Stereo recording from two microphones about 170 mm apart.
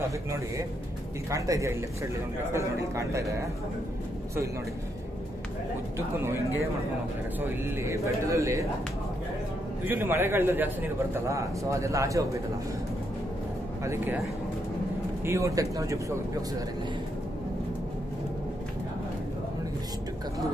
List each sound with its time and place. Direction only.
1.3 s a man's voice: 20° right (ahead or behind)
7.3 s a man's voice: 15° right (ahead or behind)
9.8 s a man's voice: 10° right (ahead or behind)
15.2 s speech: 20° right (ahead or behind)